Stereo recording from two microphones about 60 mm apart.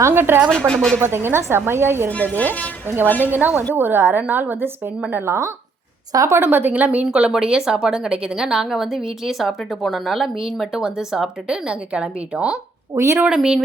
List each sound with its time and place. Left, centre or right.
0.0 s speech: right
0.7 s a woman's voice: centre
0.9 s a woman's voice: right
2.0 s speech: left
3.2 s a woman's voice: right
5.1 s a woman's voice: right
7.1 s a woman's voice: centre
13.0 s speech: right
13.2 s a woman's voice: centre